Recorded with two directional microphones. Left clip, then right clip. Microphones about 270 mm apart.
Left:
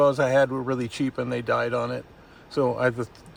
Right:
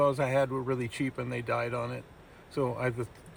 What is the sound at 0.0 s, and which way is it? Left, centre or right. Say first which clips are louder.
Speech: left 7 dB; centre.